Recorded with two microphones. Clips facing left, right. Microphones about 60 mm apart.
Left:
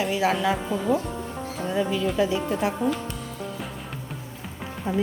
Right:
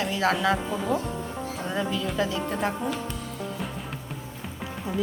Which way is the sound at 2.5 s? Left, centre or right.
Centre.